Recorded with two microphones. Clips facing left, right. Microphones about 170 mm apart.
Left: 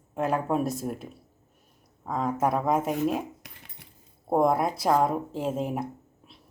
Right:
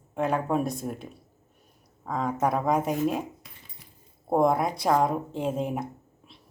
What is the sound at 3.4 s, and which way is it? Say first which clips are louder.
Dog: left 2 dB; 65° left (ahead or behind).